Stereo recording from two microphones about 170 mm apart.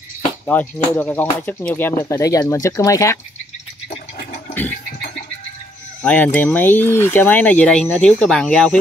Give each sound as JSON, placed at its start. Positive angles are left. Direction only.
{"t": 0.5, "sound": "speech", "side_deg": 10}
{"t": 6.0, "sound": "speech", "side_deg": 10}